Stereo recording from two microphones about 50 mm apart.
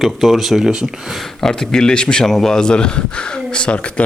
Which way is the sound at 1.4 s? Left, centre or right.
Centre.